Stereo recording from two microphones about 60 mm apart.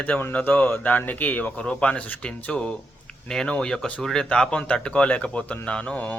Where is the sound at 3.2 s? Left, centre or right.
Centre.